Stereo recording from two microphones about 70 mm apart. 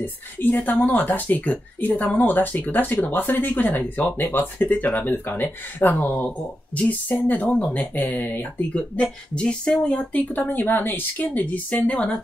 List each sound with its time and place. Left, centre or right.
0.0 s speech: left; by 10.2 s centre
10.3 s speech: left